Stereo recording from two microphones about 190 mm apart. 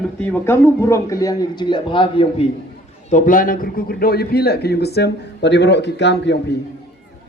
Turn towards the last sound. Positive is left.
turn(degrees=65)  # may be behind; listen again after turning